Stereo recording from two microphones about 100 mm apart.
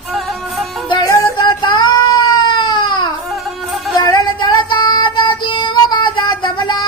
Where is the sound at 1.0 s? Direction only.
35° left (ahead or behind).